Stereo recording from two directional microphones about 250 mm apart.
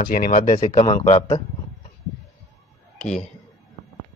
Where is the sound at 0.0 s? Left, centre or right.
Left.